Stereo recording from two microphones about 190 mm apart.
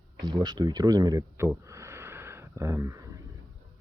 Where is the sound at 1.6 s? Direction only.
15° right (ahead or behind).